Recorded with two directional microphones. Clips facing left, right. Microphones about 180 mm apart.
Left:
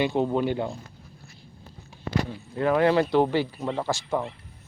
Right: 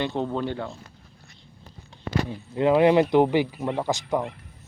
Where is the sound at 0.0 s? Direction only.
10° left (ahead or behind).